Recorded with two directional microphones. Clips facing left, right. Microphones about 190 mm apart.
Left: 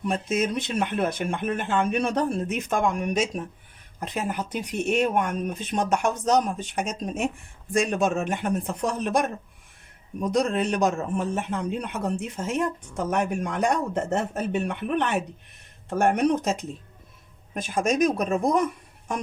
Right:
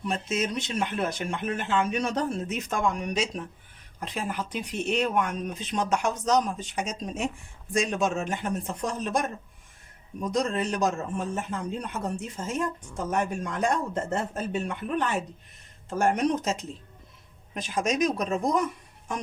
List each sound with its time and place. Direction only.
0.1 s speech: 55° left (ahead or behind)
10.3 s a man's voice: 65° left (ahead or behind)